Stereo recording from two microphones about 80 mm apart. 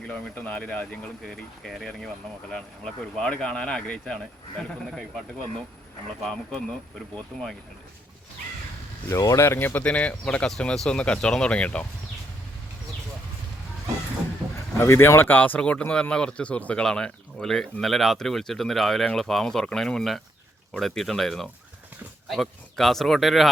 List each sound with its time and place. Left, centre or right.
0.0 s speech: centre
1.3 s speech: centre
9.0 s speech: left; by 11.9 s centre
14.8 s speech: left; by 23.5 s centre